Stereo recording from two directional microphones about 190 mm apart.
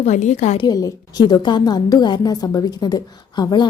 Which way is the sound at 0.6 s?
20° left (ahead or behind).